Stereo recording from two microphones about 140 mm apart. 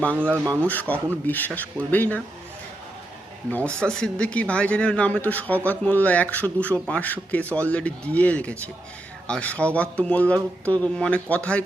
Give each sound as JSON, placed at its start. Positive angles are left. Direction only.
{"t": 0.2, "sound": "speech", "side_deg": -15}
{"t": 0.7, "sound": "speech", "side_deg": 10}
{"t": 3.8, "sound": "speech", "side_deg": 5}